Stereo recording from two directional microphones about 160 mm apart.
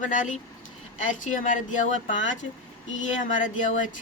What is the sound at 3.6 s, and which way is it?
Speech, 55° left (ahead or behind).